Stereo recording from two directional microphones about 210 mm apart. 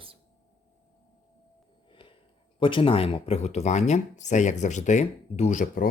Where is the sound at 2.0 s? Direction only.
25° left (ahead or behind).